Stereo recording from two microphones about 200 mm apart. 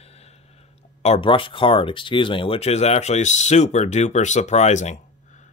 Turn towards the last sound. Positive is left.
turn(degrees=35)  # may be behind; listen again after turning